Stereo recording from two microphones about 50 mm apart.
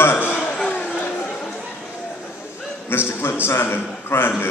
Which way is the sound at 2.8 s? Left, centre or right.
Left.